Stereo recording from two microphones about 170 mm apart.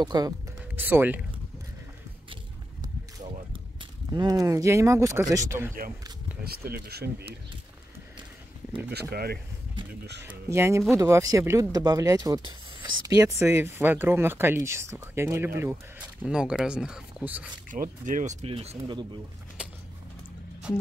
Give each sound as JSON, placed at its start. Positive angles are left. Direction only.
{"t": 0.0, "sound": "speech", "side_deg": -25}
{"t": 0.7, "sound": "speech", "side_deg": -10}
{"t": 4.1, "sound": "speech", "side_deg": -25}
{"t": 6.4, "sound": "speech", "side_deg": -65}
{"t": 9.1, "sound": "speech", "side_deg": -65}
{"t": 10.2, "sound": "speech", "side_deg": -15}
{"t": 17.6, "sound": "speech", "side_deg": -50}